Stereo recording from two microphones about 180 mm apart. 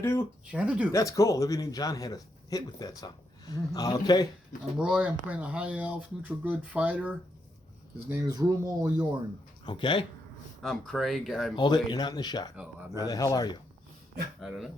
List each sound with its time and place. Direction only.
0.0 s speech: 15° left (ahead or behind)
0.5 s speech: 5° right (ahead or behind)
0.9 s speech: 20° left (ahead or behind)
4.8 s speech: 5° right (ahead or behind)
8.1 s speech: 20° right (ahead or behind)
9.6 s speech: 25° left (ahead or behind)
10.6 s speech: centre (ahead or behind)
11.5 s speech: 25° left (ahead or behind)
12.5 s speech: 10° right (ahead or behind)
13.0 s speech: 20° left (ahead or behind)
14.4 s speech: centre (ahead or behind)